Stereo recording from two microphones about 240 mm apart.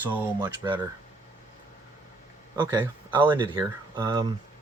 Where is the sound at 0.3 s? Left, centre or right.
Centre.